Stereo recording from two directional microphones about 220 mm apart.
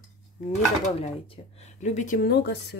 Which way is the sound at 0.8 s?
25° left (ahead or behind).